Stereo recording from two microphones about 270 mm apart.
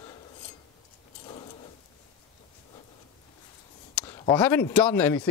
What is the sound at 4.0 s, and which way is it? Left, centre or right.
Speech, centre.